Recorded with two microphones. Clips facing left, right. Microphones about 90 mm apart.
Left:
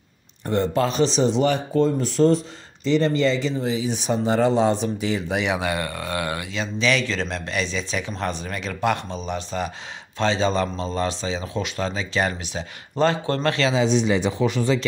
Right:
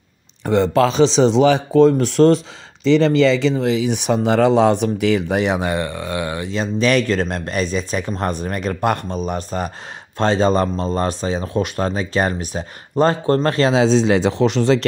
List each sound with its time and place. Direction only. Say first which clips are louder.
0.5 s speech: right 6 dB; 90° right; by 5.4 s 65° right (ahead or behind)
5.6 s speech: right 4 dB; 25° right (ahead or behind)
6.5 s speech: right 6 dB; 45° right (ahead or behind)
13.7 s speech: right 5 dB; 90° right